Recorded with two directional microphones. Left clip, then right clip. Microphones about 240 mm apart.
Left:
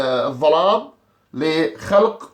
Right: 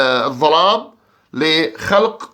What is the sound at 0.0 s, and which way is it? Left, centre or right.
Speech, right.